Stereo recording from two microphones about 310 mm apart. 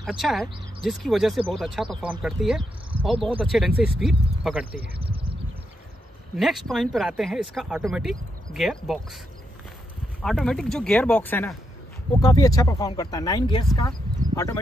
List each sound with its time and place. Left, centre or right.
0.0 s speech: centre
4.9 s a sound: centre
6.3 s speech: centre
10.2 s speech: centre